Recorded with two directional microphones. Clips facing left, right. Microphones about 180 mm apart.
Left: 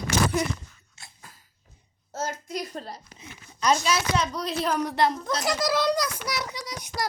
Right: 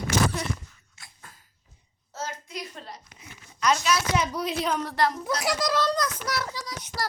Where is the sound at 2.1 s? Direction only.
45° left (ahead or behind).